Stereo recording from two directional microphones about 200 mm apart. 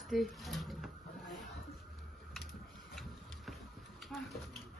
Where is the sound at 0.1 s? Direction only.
Centre (ahead or behind).